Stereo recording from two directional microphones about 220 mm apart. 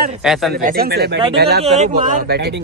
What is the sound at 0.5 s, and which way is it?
Speech, 40° right (ahead or behind).